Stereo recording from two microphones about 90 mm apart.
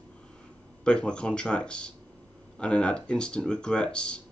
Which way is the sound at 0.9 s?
10° left (ahead or behind).